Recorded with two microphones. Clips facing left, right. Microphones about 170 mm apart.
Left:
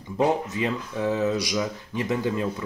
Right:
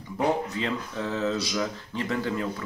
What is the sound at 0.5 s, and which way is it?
Speech, 15° left (ahead or behind).